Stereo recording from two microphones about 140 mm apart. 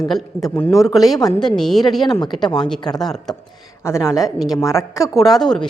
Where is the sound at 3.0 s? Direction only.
5° left (ahead or behind).